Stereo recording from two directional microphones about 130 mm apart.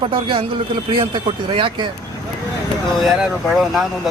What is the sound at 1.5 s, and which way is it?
Speech, 40° right (ahead or behind).